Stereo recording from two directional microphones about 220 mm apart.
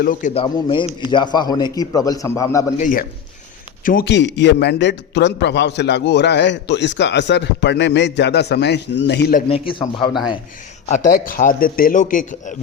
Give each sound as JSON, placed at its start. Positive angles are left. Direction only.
{"t": 0.0, "sound": "a man's voice", "side_deg": 35}
{"t": 0.4, "sound": "a man's voice", "side_deg": 20}
{"t": 2.7, "sound": "a man's voice", "side_deg": 35}
{"t": 9.5, "sound": "a man's voice", "side_deg": 25}
{"t": 10.9, "sound": "a man's voice", "side_deg": 35}